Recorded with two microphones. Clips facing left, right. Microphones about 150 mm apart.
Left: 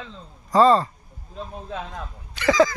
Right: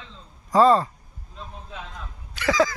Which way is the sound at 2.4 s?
5° right (ahead or behind).